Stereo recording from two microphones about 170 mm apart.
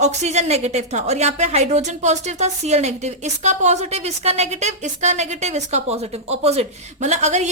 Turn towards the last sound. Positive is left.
turn(degrees=-40)  # may be behind; listen again after turning